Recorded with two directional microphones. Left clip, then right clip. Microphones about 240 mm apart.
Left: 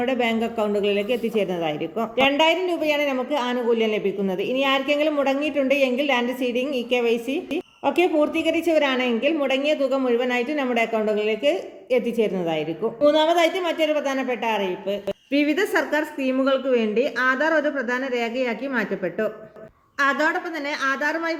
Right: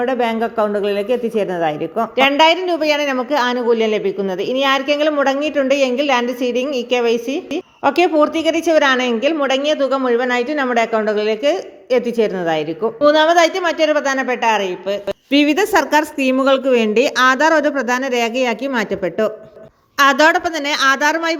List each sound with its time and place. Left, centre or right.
0.0 s a woman's voice: centre
15.3 s a woman's voice: right